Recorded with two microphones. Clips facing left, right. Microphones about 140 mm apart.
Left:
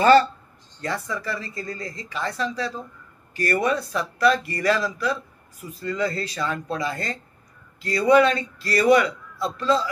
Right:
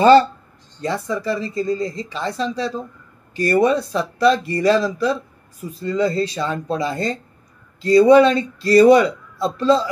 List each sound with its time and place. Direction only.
0.0 s speech: 25° right (ahead or behind)